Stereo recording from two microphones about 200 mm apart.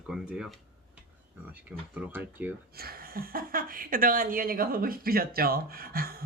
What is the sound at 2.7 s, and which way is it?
A woman's voice, 50° right (ahead or behind).